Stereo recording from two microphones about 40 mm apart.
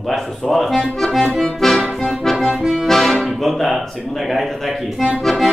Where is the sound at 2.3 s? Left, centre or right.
Centre.